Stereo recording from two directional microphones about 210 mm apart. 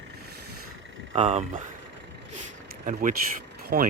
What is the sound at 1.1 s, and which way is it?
Speech, 30° right (ahead or behind).